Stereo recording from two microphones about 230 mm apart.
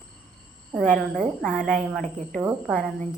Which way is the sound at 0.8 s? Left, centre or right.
Centre.